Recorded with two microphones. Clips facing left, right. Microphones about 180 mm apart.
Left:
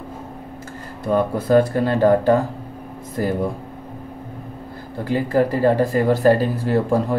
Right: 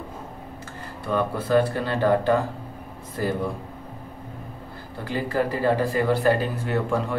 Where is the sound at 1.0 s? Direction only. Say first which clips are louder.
Left 6 dB; 45° left (ahead or behind).